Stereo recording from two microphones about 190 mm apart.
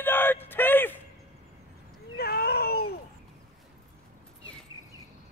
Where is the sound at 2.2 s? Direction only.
55° left (ahead or behind).